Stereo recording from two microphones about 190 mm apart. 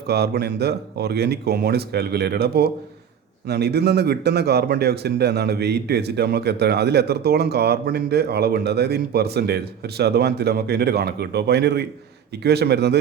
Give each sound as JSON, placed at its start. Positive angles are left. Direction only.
{"t": 0.1, "sound": "a man's voice", "side_deg": -60}